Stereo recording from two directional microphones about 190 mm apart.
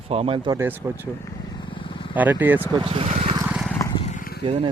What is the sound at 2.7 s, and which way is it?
Speech, 30° right (ahead or behind).